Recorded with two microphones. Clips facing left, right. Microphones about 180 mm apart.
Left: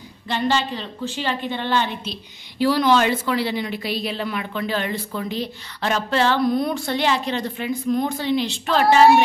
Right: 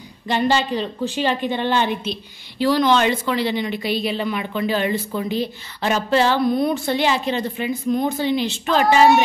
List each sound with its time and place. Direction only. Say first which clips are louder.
0.3 s a woman's voice: right 3 dB; 15° right (ahead or behind)
2.6 s a woman's voice: right 1 dB; 5° left (ahead or behind)